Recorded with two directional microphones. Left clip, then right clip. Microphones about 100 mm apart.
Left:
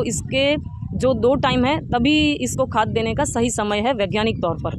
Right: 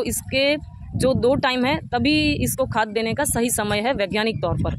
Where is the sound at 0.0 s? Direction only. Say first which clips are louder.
Left 1 dB; 20° right (ahead or behind).